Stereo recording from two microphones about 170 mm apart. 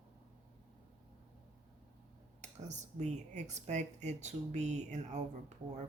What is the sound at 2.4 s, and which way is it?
Speech, 45° right (ahead or behind).